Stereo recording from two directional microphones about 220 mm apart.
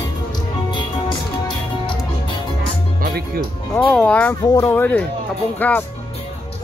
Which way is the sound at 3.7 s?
5° left (ahead or behind).